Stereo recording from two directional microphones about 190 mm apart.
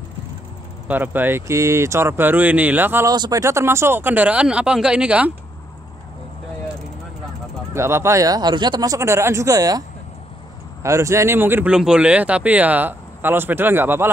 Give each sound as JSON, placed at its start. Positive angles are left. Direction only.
{"t": 0.8, "sound": "speech", "side_deg": -10}
{"t": 7.7, "sound": "speech", "side_deg": -15}